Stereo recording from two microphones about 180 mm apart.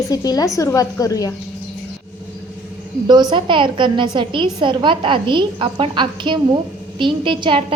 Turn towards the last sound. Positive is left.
turn(degrees=-30)  # may be behind; listen again after turning